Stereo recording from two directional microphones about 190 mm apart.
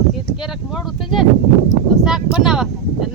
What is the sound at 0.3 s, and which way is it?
Speech, 5° right (ahead or behind).